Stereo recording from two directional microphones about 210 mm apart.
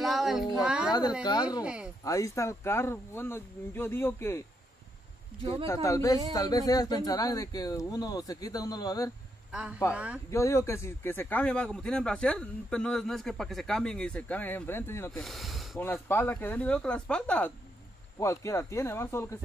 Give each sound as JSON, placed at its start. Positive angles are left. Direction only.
{"t": 0.0, "sound": "a sound", "side_deg": 0}
{"t": 1.2, "sound": "a woman's voice", "side_deg": 20}
{"t": 1.6, "sound": "speech", "side_deg": -5}
{"t": 2.0, "sound": "speech", "side_deg": 15}
{"t": 5.4, "sound": "speech", "side_deg": -25}
{"t": 5.7, "sound": "speech", "side_deg": 15}
{"t": 9.5, "sound": "speech", "side_deg": -5}
{"t": 10.3, "sound": "speech", "side_deg": 15}
{"t": 15.8, "sound": "speech", "side_deg": 10}